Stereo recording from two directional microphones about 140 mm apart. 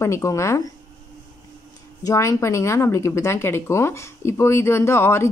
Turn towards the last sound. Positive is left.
turn(degrees=20)  # may be behind; listen again after turning